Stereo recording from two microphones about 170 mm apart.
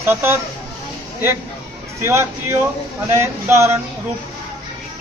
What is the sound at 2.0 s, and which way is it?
Speech, 15° right (ahead or behind).